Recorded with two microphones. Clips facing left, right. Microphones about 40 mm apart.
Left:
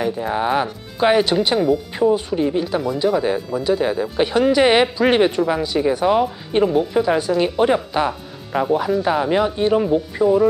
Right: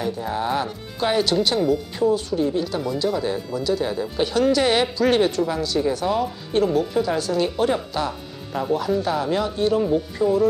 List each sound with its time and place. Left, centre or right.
0.0 s speech: left
10.2 s speech: centre